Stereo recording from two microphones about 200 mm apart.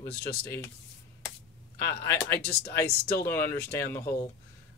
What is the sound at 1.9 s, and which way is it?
Speech, 10° left (ahead or behind).